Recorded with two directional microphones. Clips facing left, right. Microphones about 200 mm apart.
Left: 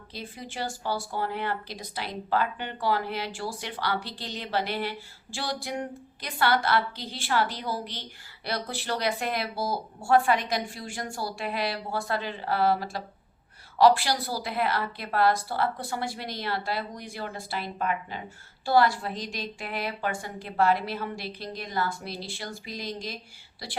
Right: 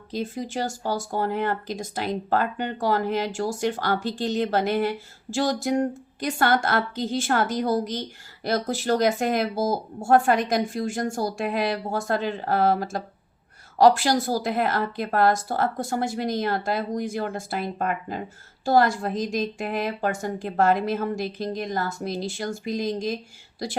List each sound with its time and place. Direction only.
0.1 s speech: 45° right (ahead or behind)